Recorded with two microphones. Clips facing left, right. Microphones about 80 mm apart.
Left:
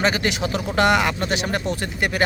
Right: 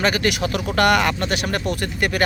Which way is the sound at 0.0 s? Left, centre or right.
Left.